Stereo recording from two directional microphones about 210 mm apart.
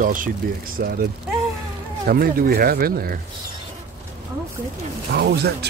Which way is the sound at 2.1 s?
45° right (ahead or behind).